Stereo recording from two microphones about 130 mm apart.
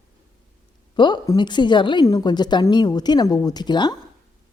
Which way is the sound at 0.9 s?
35° left (ahead or behind).